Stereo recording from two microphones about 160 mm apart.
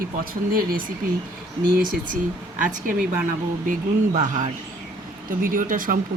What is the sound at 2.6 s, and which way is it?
Speech, 55° right (ahead or behind).